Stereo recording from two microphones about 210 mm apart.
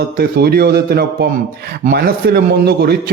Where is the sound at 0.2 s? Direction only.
50° right (ahead or behind).